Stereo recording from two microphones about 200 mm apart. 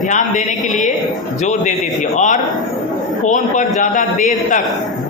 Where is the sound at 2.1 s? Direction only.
40° left (ahead or behind).